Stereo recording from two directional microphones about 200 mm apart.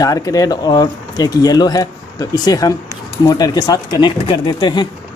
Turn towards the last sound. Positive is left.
turn(degrees=20)  # may be behind; listen again after turning